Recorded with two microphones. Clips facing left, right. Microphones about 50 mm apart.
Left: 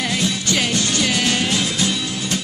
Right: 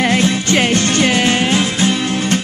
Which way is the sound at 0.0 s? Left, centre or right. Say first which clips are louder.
Right 7 dB; right.